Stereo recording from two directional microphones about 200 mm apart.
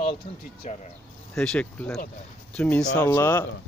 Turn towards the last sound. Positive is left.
turn(degrees=15)  # may be behind; listen again after turning